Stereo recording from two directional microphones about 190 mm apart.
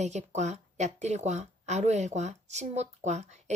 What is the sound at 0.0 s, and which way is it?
Speech, 35° right (ahead or behind).